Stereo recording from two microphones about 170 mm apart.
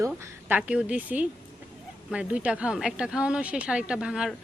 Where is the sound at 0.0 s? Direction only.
10° right (ahead or behind).